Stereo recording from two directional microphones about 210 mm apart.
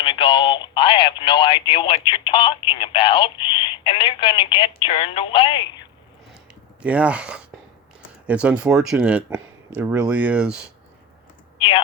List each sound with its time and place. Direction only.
0.0 s speech: 25° left (ahead or behind)
6.8 s speech: 5° right (ahead or behind)
11.5 s speech: 25° left (ahead or behind)